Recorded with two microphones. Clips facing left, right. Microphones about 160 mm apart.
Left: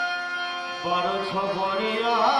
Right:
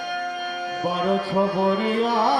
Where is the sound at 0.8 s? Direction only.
45° right (ahead or behind).